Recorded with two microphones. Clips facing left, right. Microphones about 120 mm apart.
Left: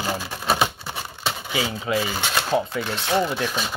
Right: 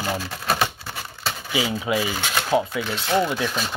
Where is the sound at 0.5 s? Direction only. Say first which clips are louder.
Left 2 dB; 20° left (ahead or behind).